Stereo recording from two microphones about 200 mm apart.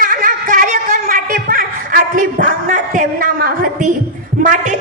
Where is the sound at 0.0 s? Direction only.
45° right (ahead or behind).